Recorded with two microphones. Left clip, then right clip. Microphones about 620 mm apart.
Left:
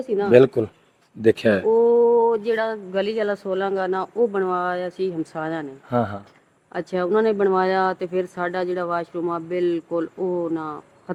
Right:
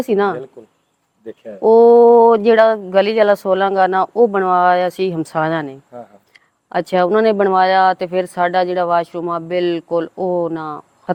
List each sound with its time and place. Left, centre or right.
0.0 s speech: right
1.2 s speech: left
1.6 s speech: right
6.7 s speech: right